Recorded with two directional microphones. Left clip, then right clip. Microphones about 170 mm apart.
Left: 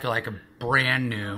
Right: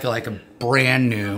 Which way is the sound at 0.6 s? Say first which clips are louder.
Right 4 dB; 15° right (ahead or behind).